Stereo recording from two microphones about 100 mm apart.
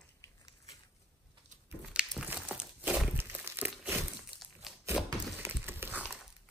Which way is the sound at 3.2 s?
20° right (ahead or behind).